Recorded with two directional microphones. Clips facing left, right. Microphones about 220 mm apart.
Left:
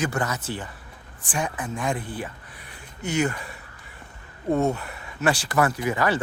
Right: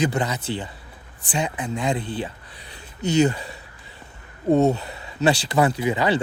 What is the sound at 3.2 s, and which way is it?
Speech, 25° right (ahead or behind).